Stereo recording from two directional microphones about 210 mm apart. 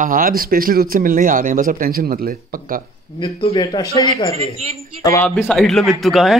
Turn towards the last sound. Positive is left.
turn(degrees=0)  # may be behind; listen again after turning